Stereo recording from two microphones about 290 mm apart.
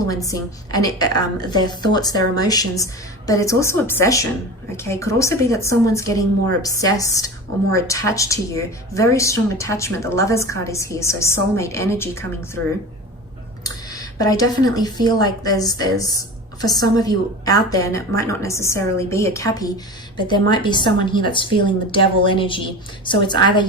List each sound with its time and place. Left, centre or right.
0.1 s speech: centre
13.7 s speech: centre